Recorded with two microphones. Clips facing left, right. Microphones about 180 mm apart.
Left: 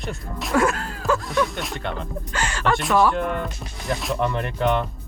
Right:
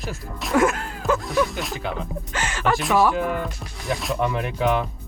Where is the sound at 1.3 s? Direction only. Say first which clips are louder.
Right 1 dB; centre (ahead or behind).